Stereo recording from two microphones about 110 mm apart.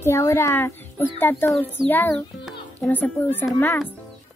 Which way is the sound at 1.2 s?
15° left (ahead or behind).